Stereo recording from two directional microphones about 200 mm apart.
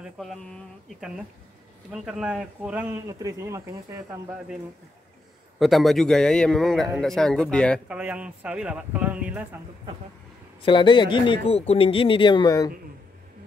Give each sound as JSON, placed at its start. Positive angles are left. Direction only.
{"t": 0.2, "sound": "a man's voice", "side_deg": 0}
{"t": 5.6, "sound": "a man's voice", "side_deg": 0}
{"t": 7.9, "sound": "speech", "side_deg": -5}
{"t": 10.6, "sound": "a man's voice", "side_deg": 25}